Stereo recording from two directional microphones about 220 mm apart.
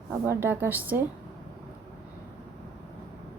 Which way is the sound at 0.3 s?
10° right (ahead or behind).